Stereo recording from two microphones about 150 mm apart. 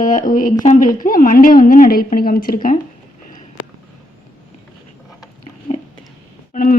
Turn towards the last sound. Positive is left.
turn(degrees=70)  # may be behind; listen again after turning